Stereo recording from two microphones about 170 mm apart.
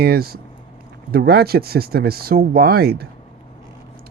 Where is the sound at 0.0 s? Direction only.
65° right (ahead or behind).